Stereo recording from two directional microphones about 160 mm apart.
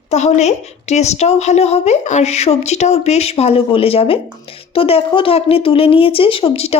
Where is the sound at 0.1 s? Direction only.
45° left (ahead or behind).